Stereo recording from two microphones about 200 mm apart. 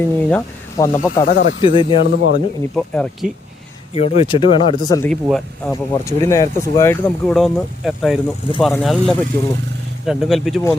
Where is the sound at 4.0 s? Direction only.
30° left (ahead or behind).